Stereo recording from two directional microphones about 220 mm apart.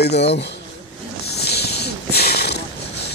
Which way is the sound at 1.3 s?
45° left (ahead or behind).